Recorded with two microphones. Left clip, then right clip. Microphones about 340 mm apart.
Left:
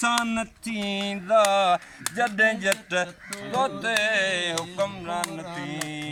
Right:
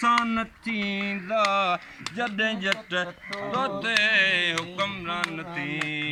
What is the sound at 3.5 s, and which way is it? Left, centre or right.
Music, left.